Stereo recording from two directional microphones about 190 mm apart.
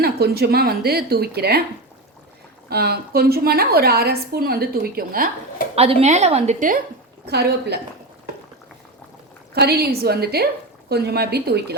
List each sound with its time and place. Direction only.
0.0 s a woman's voice: 55° right (ahead or behind)
2.6 s a woman's voice: 55° right (ahead or behind)
5.7 s a woman's voice: 35° right (ahead or behind)
7.3 s a woman's voice: 55° right (ahead or behind)
9.6 s a woman's voice: 55° right (ahead or behind)